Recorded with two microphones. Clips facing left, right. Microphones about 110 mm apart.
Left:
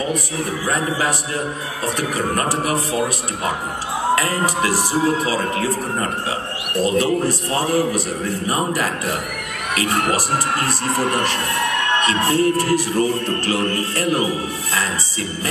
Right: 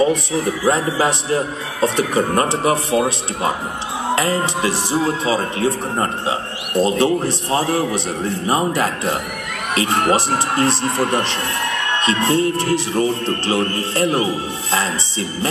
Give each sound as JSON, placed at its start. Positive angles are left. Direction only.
{"t": 0.7, "sound": "speech", "side_deg": -25}
{"t": 4.1, "sound": "speech", "side_deg": -25}